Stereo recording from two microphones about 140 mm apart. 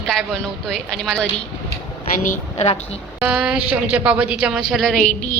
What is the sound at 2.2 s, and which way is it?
Speech, 60° left (ahead or behind).